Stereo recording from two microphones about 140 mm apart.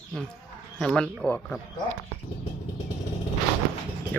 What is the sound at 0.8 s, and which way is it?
Speech, 5° left (ahead or behind).